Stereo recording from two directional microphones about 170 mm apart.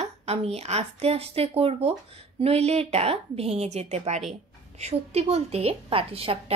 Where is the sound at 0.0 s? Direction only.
40° right (ahead or behind).